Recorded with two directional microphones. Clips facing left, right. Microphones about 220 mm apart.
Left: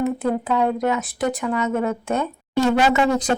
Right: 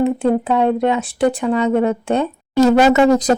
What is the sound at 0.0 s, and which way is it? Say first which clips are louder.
Speech: right 6 dB; 30° right (ahead or behind).